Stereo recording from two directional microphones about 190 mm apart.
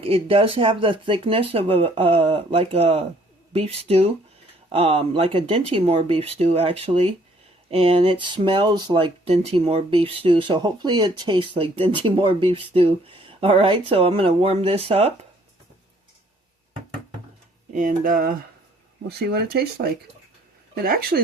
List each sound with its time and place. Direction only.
0.0 s speech: 30° right (ahead or behind)
17.7 s speech: 45° right (ahead or behind)